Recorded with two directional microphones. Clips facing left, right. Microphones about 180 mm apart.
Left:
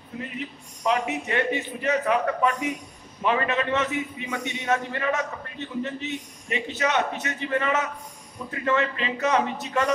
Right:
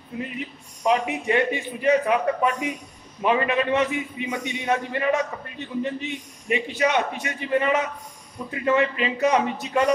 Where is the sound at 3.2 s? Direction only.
15° right (ahead or behind).